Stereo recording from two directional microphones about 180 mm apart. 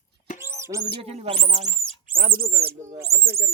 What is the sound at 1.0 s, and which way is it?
Speech, 35° right (ahead or behind).